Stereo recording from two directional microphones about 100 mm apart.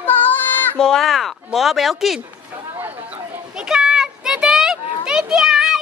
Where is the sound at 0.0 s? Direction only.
20° left (ahead or behind).